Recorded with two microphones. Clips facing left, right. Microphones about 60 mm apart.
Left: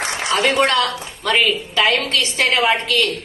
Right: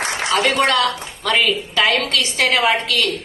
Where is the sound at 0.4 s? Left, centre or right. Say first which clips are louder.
Left 1 dB; left.